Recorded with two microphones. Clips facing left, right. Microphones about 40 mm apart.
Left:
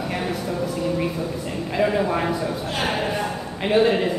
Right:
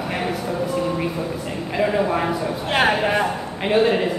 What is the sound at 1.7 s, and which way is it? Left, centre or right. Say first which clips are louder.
Speech: right 1 dB; centre.